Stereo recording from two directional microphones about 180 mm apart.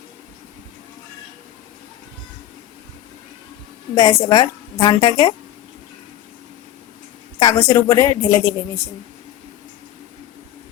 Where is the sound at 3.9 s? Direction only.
20° left (ahead or behind).